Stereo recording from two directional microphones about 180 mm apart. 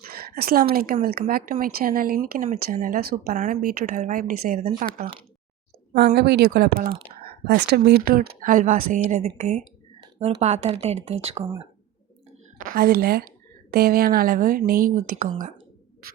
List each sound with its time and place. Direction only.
0.0 s a woman's voice: 60° right (ahead or behind); by 5.0 s 45° right (ahead or behind)
6.1 s speech: 65° right (ahead or behind); by 11.4 s 35° right (ahead or behind)
12.5 s a woman's voice: 50° right (ahead or behind)